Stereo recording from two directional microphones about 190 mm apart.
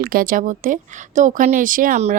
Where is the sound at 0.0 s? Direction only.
50° right (ahead or behind).